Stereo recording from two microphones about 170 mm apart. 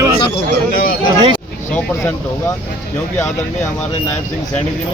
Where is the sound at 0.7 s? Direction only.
60° left (ahead or behind).